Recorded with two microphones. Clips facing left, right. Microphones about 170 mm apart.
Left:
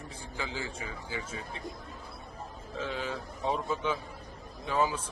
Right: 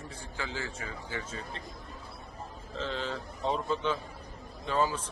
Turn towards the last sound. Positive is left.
turn(degrees=10)  # may be behind; listen again after turning